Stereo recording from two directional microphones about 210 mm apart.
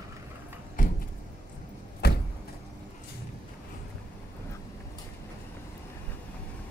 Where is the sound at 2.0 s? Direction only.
50° left (ahead or behind).